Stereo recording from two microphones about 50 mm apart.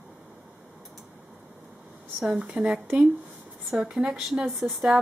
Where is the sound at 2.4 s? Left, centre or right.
Right.